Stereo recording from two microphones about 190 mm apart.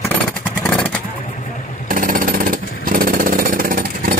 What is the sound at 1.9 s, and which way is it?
Jackhammer, 45° right (ahead or behind).